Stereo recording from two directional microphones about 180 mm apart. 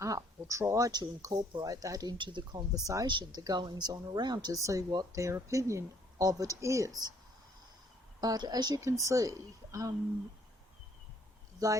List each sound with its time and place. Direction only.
0.0 s speech: 20° right (ahead or behind)
8.2 s speech: 20° right (ahead or behind)